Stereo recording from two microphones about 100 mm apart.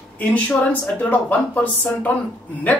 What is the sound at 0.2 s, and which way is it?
Speech, 15° left (ahead or behind).